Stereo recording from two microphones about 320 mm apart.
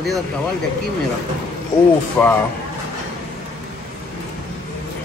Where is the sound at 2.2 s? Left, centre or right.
Centre.